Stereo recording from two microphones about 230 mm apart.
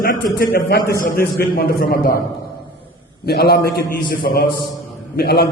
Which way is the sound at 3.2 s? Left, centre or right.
Left.